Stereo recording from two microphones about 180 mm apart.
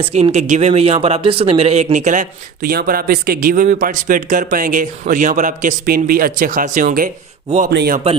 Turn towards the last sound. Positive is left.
turn(degrees=-60)  # may be behind; listen again after turning